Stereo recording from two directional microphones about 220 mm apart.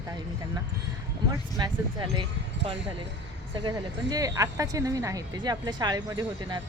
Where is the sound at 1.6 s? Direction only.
15° right (ahead or behind).